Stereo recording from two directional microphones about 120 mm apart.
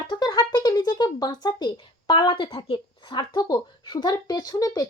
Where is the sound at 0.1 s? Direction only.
35° left (ahead or behind).